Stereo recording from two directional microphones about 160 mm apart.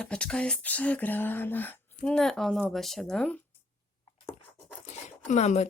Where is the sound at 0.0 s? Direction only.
5° left (ahead or behind).